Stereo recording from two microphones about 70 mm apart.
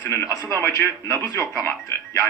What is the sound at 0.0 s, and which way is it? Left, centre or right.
Speech, left.